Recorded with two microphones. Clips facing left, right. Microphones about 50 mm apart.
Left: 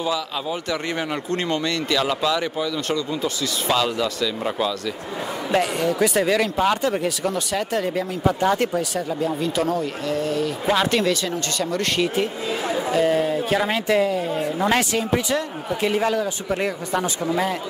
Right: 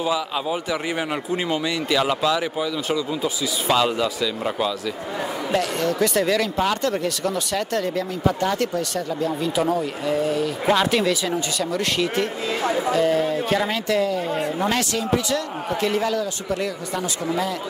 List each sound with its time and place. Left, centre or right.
0.0 s speech: centre
5.8 s speech: centre
9.6 s speech: centre
12.9 s speech: centre; by 17.0 s left